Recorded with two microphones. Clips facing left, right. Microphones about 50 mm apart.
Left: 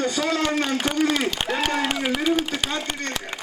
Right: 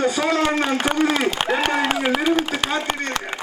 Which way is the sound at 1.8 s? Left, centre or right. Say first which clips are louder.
Right 3 dB; centre.